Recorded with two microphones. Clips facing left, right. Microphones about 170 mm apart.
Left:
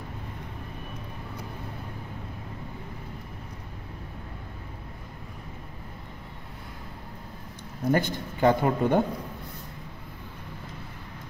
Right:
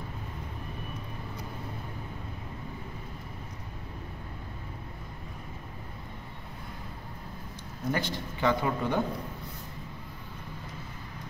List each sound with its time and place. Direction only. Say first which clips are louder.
7.9 s speech: left 6 dB; 50° left (ahead or behind)